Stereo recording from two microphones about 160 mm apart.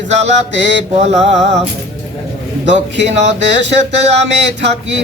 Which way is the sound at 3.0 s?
45° right (ahead or behind).